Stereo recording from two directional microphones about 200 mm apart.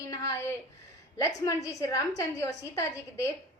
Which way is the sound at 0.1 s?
15° left (ahead or behind).